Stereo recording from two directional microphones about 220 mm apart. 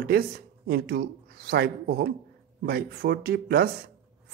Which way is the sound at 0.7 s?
45° right (ahead or behind).